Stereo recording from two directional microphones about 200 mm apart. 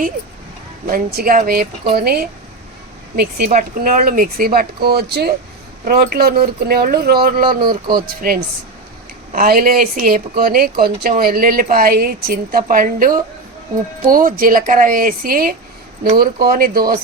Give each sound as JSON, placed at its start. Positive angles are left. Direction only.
{"t": 0.9, "sound": "speech", "side_deg": -45}
{"t": 3.2, "sound": "speech", "side_deg": -50}